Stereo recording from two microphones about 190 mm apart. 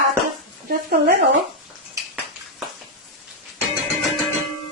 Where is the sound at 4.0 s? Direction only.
Centre (ahead or behind).